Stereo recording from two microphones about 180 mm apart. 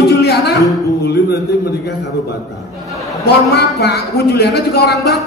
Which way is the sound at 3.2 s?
65° left (ahead or behind).